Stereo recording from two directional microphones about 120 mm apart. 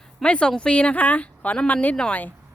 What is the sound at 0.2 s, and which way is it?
Speech, 10° left (ahead or behind).